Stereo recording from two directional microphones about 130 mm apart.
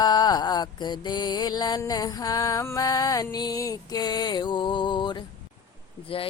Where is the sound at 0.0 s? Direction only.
30° left (ahead or behind).